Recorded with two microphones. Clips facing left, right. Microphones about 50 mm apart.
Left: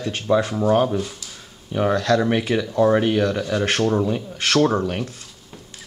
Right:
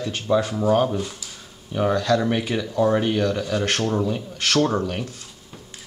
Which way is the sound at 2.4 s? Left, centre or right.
Centre.